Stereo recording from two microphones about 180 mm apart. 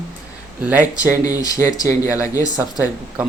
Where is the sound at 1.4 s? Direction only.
20° left (ahead or behind).